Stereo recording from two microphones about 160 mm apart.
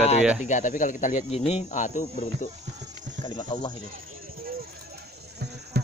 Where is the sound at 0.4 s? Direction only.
50° left (ahead or behind).